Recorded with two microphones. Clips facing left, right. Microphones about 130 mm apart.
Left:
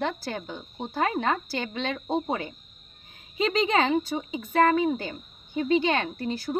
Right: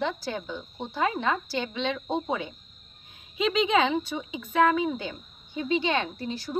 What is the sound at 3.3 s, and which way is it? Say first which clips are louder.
Speech: even; 40° left (ahead or behind).